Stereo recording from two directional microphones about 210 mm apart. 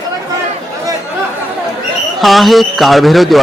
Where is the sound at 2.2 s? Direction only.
Centre (ahead or behind).